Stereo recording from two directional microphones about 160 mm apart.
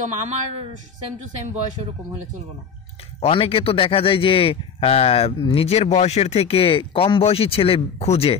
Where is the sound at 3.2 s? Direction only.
35° left (ahead or behind).